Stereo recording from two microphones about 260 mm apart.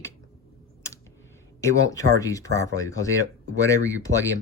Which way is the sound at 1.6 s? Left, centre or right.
Centre.